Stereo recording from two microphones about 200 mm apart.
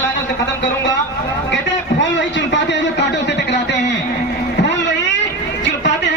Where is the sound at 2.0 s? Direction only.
65° left (ahead or behind).